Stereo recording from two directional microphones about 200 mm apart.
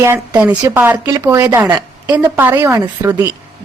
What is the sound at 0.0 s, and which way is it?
A woman's voice, 10° right (ahead or behind).